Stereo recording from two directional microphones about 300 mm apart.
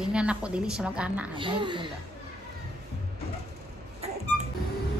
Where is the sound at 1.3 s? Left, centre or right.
Centre.